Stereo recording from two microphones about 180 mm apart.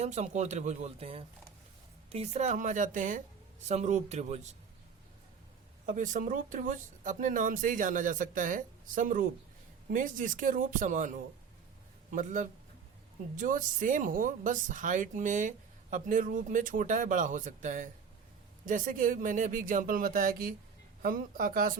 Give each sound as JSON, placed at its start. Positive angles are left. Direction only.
{"t": 0.0, "sound": "speech", "side_deg": -40}
{"t": 5.9, "sound": "speech", "side_deg": -45}